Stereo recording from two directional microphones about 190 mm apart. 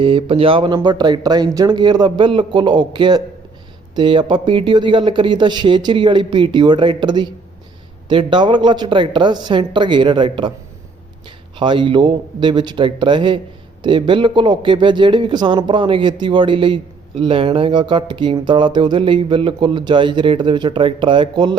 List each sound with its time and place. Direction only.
0.0 s a man's voice: 25° right (ahead or behind)
11.6 s a man's voice: 25° right (ahead or behind)